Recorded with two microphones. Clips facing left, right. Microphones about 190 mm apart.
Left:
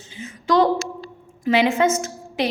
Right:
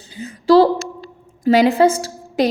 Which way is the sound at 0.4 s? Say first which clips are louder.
Right 6 dB; 30° right (ahead or behind).